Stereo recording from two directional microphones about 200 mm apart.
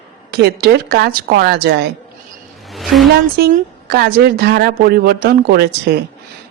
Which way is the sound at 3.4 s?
50° right (ahead or behind).